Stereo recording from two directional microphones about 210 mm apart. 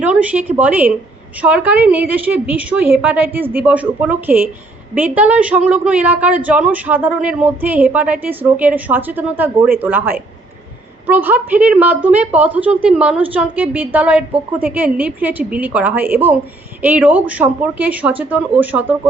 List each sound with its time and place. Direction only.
0.0 s a woman's voice: 5° right (ahead or behind)